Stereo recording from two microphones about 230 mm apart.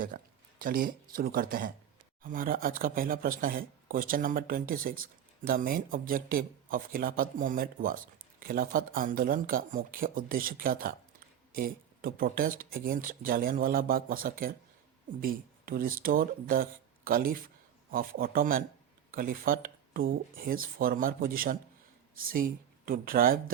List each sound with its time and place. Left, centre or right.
0.1 s speech: right